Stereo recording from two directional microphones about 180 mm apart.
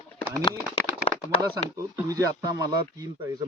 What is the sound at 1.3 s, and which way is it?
Speech, 20° right (ahead or behind).